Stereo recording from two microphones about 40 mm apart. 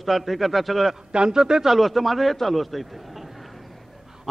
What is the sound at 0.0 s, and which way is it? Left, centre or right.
Speech, centre.